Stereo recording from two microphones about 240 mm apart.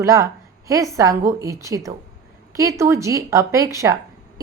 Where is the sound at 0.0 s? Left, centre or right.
Centre.